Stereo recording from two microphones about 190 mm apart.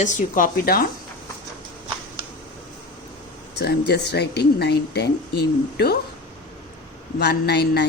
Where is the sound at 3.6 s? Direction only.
60° left (ahead or behind).